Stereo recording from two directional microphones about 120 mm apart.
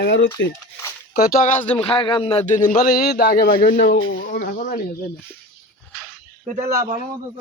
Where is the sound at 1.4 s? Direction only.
70° left (ahead or behind); by 2.3 s 45° left (ahead or behind).